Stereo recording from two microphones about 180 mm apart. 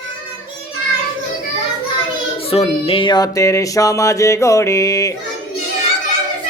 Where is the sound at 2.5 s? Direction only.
35° left (ahead or behind).